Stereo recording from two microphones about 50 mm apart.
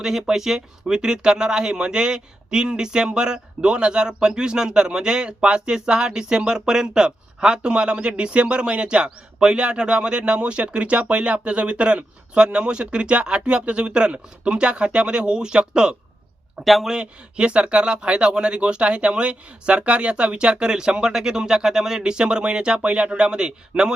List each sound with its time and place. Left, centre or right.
0.0 s speech: centre
16.6 s speech: centre
16.9 s speech: centre